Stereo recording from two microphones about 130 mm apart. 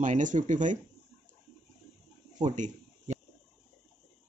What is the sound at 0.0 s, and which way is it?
Speech, 75° right (ahead or behind).